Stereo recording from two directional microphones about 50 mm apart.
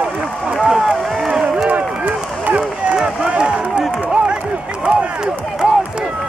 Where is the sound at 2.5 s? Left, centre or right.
Centre.